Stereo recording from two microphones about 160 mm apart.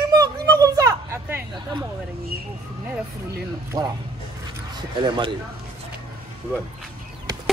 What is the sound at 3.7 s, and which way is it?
Speech, 25° right (ahead or behind).